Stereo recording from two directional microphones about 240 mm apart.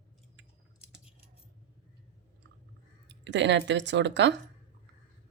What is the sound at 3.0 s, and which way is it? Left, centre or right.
Speech, right.